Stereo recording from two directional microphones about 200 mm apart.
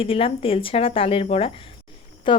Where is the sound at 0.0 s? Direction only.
30° left (ahead or behind).